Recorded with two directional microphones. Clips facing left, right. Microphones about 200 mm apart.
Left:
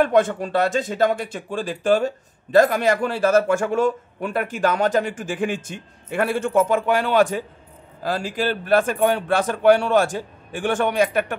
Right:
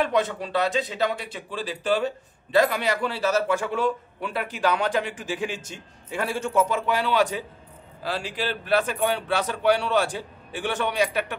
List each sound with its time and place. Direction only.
0.0 s speech: 50° left (ahead or behind)